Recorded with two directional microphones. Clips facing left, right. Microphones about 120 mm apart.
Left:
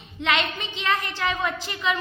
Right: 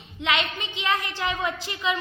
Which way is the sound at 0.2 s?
10° right (ahead or behind).